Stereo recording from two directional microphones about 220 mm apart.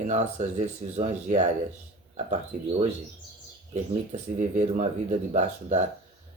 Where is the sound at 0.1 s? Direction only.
30° right (ahead or behind).